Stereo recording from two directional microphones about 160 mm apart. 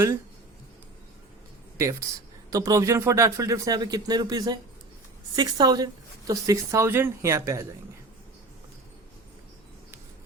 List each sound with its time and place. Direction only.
1.8 s speech: 20° right (ahead or behind)